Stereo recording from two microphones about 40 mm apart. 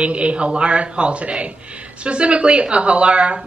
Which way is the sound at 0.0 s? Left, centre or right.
Right.